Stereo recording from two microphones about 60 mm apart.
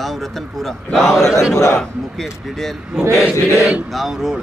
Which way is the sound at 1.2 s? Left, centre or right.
Left.